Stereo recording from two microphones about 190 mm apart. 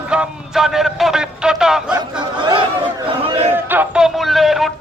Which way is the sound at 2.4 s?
25° right (ahead or behind).